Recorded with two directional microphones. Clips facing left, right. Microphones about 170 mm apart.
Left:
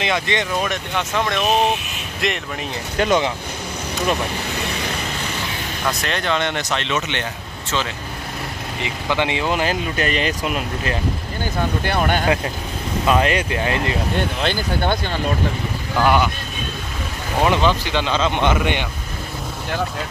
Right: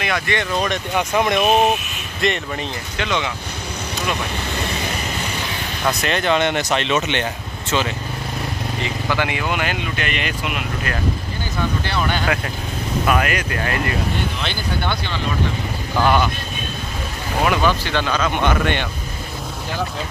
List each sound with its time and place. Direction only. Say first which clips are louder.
0.0 s speech: left 1 dB; 20° left (ahead or behind)
0.5 s speech: right 1 dB; 5° left (ahead or behind)
0.9 s speech: right 4 dB; 15° right (ahead or behind)
2.2 s speech: right 3 dB; centre (ahead or behind)
3.0 s speech: left 5 dB; 40° left (ahead or behind)
6.0 s speech: right 5 dB; 5° right (ahead or behind)
8.8 s speech: left 2 dB; 20° left (ahead or behind)
11.8 s speech: left 2 dB; 50° left (ahead or behind)
13.0 s speech: left 3 dB; 25° left (ahead or behind)
14.4 s speech: left 3 dB; 45° left (ahead or behind)
16.0 s speech: even; 10° left (ahead or behind)
17.5 s speech: even; 20° left (ahead or behind)